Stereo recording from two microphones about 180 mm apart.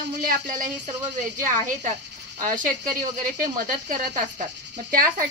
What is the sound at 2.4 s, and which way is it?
Speech, 50° right (ahead or behind).